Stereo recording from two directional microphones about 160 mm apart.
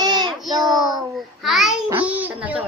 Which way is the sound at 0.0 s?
25° right (ahead or behind).